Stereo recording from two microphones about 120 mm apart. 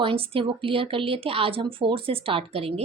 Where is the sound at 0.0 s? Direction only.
45° right (ahead or behind).